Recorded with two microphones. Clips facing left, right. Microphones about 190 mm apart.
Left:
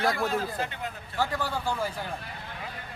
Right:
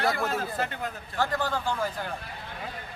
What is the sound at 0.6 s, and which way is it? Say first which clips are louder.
Speech: right 2 dB; 45° right (ahead or behind).